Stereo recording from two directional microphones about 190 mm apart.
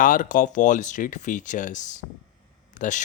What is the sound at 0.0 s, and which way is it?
Speech, 45° left (ahead or behind).